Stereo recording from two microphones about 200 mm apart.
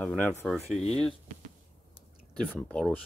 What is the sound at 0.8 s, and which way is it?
Speech, 30° left (ahead or behind).